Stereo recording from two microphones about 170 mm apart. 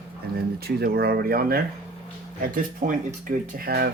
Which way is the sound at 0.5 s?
65° right (ahead or behind).